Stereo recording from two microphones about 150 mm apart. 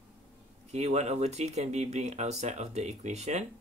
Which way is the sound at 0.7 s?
50° right (ahead or behind).